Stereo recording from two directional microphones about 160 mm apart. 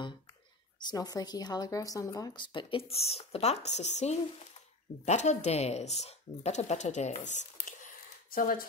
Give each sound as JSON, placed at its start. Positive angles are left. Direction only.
{"t": 0.8, "sound": "speech", "side_deg": 25}